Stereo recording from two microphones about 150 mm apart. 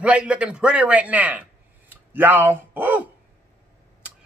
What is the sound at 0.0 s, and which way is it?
A man's voice, 10° right (ahead or behind).